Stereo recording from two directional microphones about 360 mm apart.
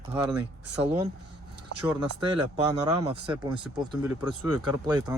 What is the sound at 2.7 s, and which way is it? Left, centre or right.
Speech, centre.